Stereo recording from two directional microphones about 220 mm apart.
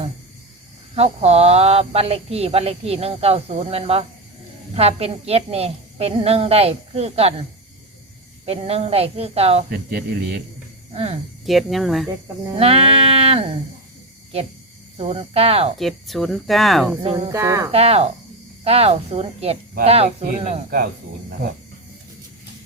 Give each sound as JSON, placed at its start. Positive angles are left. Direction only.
{"t": 0.9, "sound": "speech", "side_deg": -30}
{"t": 8.4, "sound": "speech", "side_deg": -25}
{"t": 9.6, "sound": "speech", "side_deg": -40}
{"t": 10.9, "sound": "speech", "side_deg": -25}
{"t": 11.4, "sound": "speech", "side_deg": 0}
{"t": 12.5, "sound": "speech", "side_deg": -25}
{"t": 14.9, "sound": "speech", "side_deg": -25}
{"t": 15.8, "sound": "speech", "side_deg": 0}
{"t": 17.0, "sound": "speech", "side_deg": -20}
{"t": 17.7, "sound": "speech", "side_deg": -25}